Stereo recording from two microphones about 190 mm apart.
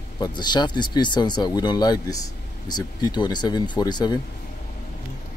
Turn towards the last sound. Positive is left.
turn(degrees=20)  # may be behind; listen again after turning